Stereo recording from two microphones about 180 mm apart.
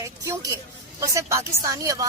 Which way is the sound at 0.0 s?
15° right (ahead or behind).